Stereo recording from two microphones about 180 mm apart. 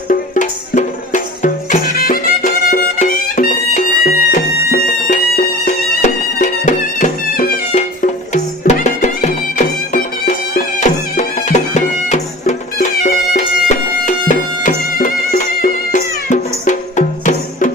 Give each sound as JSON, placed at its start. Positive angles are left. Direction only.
{"t": 0.1, "sound": "music", "side_deg": 45}